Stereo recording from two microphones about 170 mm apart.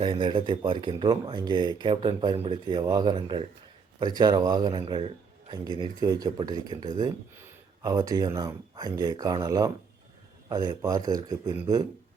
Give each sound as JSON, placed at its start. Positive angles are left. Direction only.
{"t": 0.0, "sound": "speech", "side_deg": -30}